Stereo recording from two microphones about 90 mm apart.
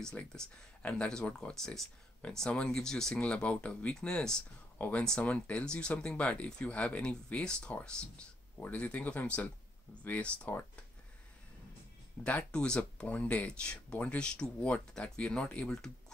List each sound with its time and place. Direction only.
0.1 s speech: 10° left (ahead or behind)
4.7 s speech: 20° left (ahead or behind)
12.2 s speech: 15° left (ahead or behind)